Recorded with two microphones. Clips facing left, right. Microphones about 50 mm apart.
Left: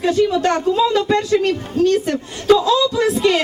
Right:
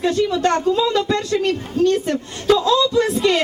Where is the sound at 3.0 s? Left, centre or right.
Left.